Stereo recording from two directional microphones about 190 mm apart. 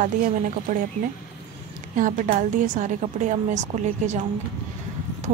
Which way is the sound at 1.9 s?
45° right (ahead or behind).